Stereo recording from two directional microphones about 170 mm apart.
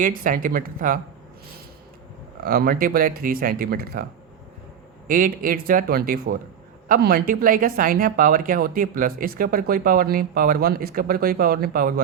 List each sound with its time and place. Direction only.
0.0 s speech: 55° right (ahead or behind)
2.4 s speech: 60° right (ahead or behind)
5.0 s speech: 55° right (ahead or behind)